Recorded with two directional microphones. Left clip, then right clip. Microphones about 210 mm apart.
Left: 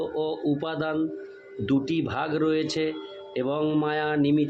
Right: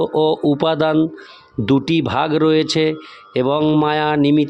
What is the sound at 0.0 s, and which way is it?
Speech, 55° right (ahead or behind).